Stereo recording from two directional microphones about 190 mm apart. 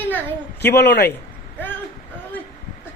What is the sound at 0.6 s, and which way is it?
Speech, 60° left (ahead or behind).